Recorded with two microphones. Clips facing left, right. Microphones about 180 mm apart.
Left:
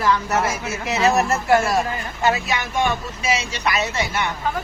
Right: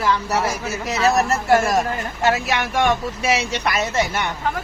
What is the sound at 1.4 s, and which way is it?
Speech, 40° right (ahead or behind).